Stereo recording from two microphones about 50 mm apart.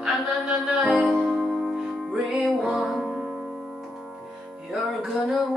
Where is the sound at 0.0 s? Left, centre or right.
Centre.